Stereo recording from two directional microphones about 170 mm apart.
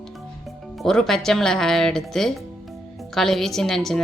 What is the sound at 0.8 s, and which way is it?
A woman's voice, 5° left (ahead or behind).